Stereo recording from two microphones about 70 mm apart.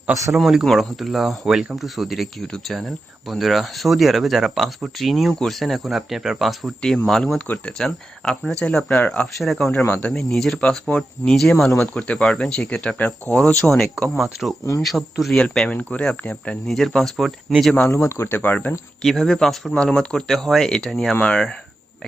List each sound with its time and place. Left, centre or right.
0.3 s speech: centre
7.3 s speech: centre
7.8 s speech: centre
9.0 s speech: left
9.4 s speech: centre
10.6 s speech: centre
13.6 s speech: centre
15.4 s speech: centre
16.6 s speech: centre
17.9 s speech: left
18.3 s speech: left
19.0 s speech: centre
21.2 s speech: centre